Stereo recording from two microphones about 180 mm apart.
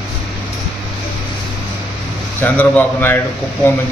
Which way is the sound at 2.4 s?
10° left (ahead or behind).